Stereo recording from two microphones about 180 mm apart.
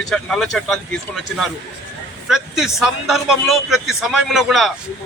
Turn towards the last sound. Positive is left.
turn(degrees=0)  # may be behind; listen again after turning